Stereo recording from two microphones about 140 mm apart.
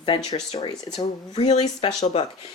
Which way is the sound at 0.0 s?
40° left (ahead or behind).